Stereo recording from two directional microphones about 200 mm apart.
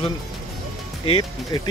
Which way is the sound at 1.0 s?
25° left (ahead or behind).